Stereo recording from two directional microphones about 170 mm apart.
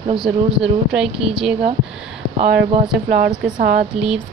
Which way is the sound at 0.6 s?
5° right (ahead or behind).